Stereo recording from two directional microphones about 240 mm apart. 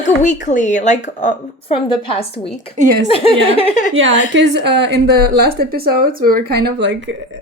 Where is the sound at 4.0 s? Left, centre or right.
Right.